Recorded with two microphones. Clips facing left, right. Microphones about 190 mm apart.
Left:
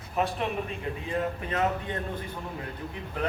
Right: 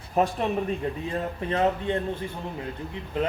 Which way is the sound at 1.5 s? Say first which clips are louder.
Right 6 dB; 30° right (ahead or behind).